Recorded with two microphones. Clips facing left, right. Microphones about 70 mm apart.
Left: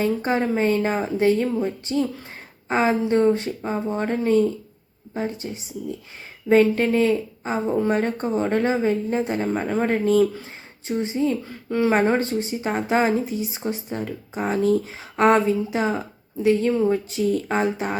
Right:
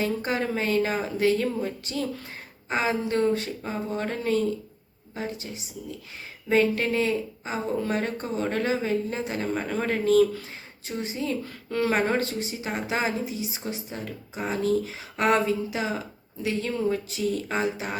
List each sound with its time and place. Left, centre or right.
0.0 s speech: left
6.5 s speech: left
11.4 s speech: left